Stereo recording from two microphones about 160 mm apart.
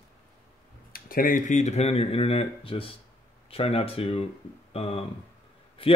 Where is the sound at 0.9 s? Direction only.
65° left (ahead or behind).